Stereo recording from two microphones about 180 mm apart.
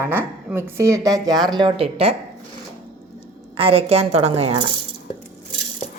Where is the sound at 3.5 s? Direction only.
30° right (ahead or behind).